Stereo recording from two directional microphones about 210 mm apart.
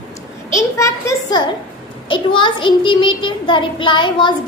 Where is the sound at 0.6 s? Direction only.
15° left (ahead or behind).